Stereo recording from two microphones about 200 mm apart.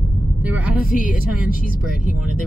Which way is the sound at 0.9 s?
45° left (ahead or behind).